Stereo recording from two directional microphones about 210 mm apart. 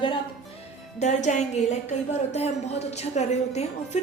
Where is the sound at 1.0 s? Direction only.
35° left (ahead or behind).